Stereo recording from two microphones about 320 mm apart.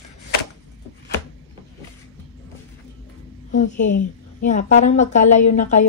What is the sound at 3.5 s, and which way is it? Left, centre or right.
A woman's voice, left.